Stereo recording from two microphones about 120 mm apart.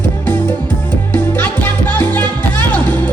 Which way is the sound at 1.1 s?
10° left (ahead or behind).